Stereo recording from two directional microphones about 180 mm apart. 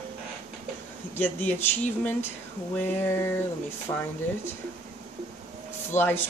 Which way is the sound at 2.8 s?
10° left (ahead or behind).